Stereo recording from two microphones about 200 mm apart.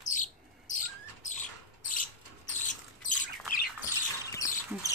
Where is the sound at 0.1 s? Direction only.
40° left (ahead or behind).